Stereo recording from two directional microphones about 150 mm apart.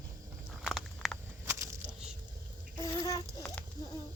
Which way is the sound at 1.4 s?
20° right (ahead or behind).